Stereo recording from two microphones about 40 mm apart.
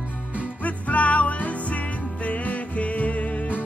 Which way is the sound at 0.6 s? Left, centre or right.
Left.